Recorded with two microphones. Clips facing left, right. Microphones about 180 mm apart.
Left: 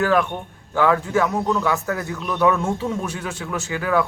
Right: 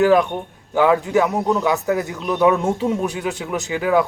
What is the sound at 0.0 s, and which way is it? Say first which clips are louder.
Speech: right 5 dB; 15° right (ahead or behind).